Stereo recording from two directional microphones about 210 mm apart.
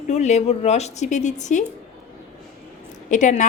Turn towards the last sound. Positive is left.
turn(degrees=35)  # may be behind; listen again after turning